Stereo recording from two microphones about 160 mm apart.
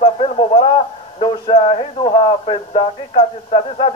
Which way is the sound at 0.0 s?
35° left (ahead or behind).